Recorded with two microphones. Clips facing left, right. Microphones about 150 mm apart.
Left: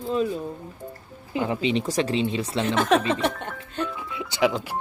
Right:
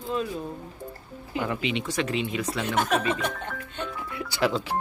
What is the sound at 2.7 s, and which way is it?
Speech, 90° left.